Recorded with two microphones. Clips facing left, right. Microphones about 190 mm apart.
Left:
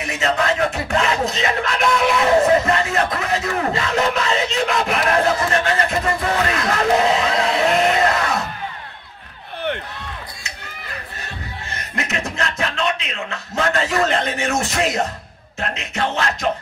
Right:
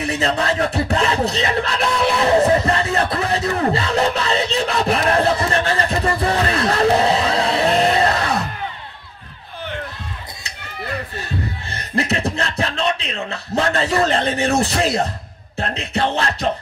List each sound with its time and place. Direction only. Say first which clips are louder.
0.0 s music: right 1 dB; 35° right (ahead or behind)
11.7 s speech: right 5 dB; 35° right (ahead or behind)
15.6 s music: right 3 dB; 35° right (ahead or behind)